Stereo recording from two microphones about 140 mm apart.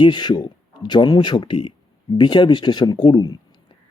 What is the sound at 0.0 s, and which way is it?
Speech, 30° left (ahead or behind).